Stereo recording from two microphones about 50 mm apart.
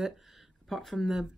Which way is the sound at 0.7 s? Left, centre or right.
Centre.